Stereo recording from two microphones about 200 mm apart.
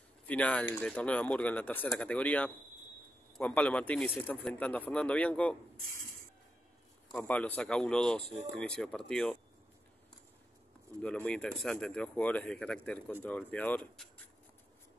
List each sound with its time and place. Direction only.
0.3 s speech: 5° left (ahead or behind)
7.1 s speech: 5° left (ahead or behind)
11.0 s speech: 5° left (ahead or behind)